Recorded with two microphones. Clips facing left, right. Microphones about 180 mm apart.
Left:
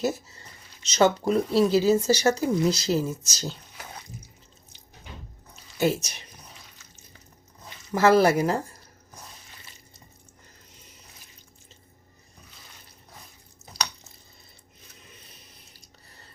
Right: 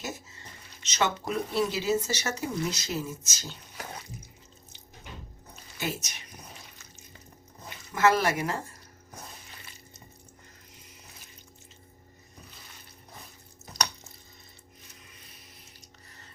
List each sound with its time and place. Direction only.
0.0 s speech: 35° left (ahead or behind)
5.8 s speech: 30° left (ahead or behind)
7.9 s speech: 35° left (ahead or behind)